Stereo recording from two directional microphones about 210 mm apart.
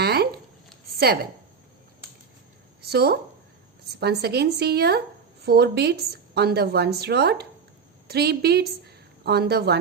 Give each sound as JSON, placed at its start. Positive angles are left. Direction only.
{"t": 0.0, "sound": "a sound", "side_deg": -50}
{"t": 0.9, "sound": "a woman's voice", "side_deg": -50}
{"t": 2.8, "sound": "a woman's voice", "side_deg": -50}